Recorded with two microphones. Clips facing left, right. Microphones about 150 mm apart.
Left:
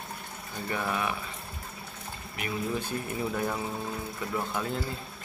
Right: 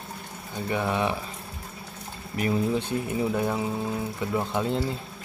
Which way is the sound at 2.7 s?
25° right (ahead or behind).